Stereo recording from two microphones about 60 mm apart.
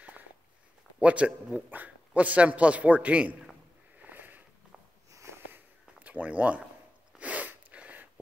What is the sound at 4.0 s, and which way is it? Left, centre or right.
Sniff, right.